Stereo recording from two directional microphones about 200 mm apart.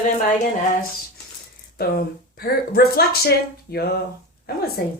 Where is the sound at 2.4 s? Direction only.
50° left (ahead or behind).